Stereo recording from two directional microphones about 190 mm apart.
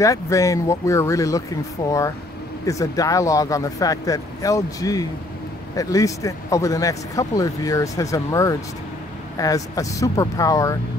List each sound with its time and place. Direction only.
0.0 s speech: 15° left (ahead or behind)